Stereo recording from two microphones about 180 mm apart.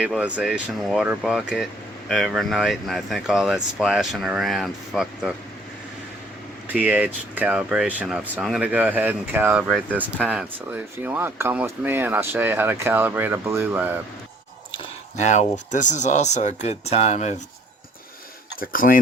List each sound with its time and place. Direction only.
0.0 s speech: 5° right (ahead or behind)
6.7 s speech: 10° right (ahead or behind)
15.1 s speech: 40° left (ahead or behind)
18.6 s speech: 50° left (ahead or behind)